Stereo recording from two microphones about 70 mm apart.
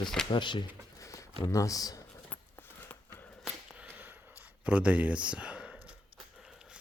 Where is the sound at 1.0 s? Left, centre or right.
Left.